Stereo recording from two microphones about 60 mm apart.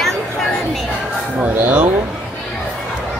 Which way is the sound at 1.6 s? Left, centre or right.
Right.